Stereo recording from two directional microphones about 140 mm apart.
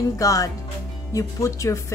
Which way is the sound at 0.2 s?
25° left (ahead or behind).